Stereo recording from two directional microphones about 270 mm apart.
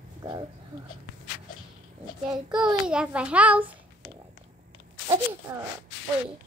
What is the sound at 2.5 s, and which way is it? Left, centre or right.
A child's voice, centre.